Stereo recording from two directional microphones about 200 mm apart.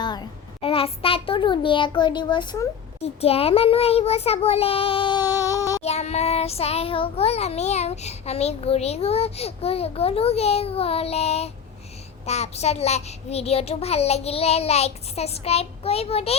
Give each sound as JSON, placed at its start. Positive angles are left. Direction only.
{"t": 0.0, "sound": "a child's voice", "side_deg": 20}
{"t": 5.8, "sound": "child singing", "side_deg": 30}